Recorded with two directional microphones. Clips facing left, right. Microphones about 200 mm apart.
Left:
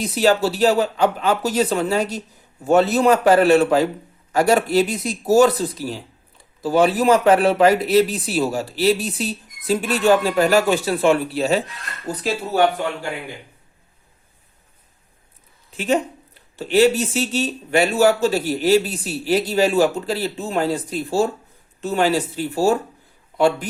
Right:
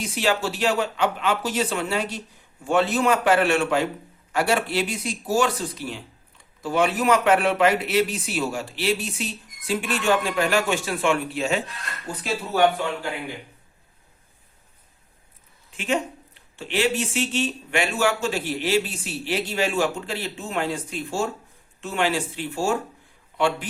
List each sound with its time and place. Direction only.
0.0 s speech: 40° left (ahead or behind)
15.7 s speech: 35° left (ahead or behind)